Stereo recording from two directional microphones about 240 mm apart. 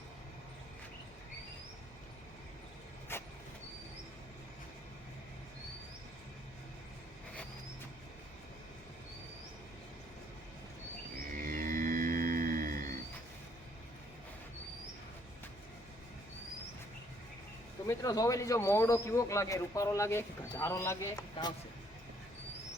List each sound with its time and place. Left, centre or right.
3.1 s vehicle: centre
11.3 s livestock: right
17.8 s a man's voice: centre